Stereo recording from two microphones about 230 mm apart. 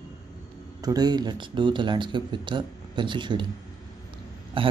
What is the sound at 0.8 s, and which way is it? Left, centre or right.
Speech, centre.